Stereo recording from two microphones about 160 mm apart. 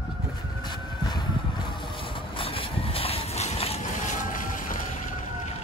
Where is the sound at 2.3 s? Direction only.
35° left (ahead or behind); by 4.9 s 55° left (ahead or behind).